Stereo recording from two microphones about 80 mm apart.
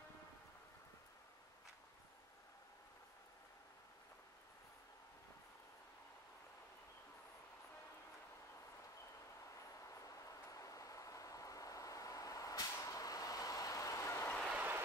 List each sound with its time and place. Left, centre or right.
10.0 s vehicle: left